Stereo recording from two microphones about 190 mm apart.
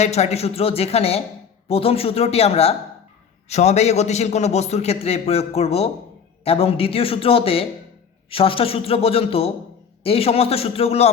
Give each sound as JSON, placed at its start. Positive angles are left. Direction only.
{"t": 0.0, "sound": "a man's voice", "side_deg": 35}